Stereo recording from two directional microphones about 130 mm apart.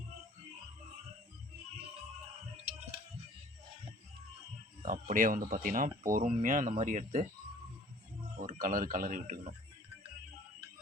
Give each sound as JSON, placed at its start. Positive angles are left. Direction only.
{"t": 4.9, "sound": "speech", "side_deg": -80}
{"t": 8.4, "sound": "speech", "side_deg": -90}